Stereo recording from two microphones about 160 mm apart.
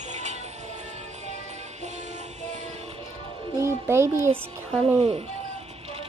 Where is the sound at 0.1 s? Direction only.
45° right (ahead or behind).